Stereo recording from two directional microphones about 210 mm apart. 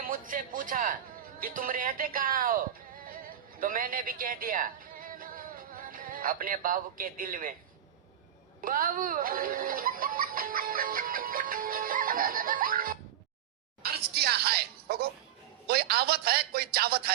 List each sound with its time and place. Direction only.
0.0 s speech: 40° right (ahead or behind)
8.6 s speech: 40° right (ahead or behind)
13.8 s a sound: 50° right (ahead or behind)
15.6 s speech: 50° right (ahead or behind)